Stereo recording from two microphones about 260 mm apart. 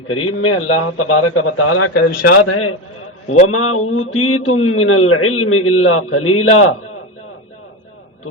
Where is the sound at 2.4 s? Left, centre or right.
Left.